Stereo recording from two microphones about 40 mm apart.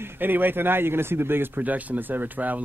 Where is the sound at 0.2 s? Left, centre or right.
Right.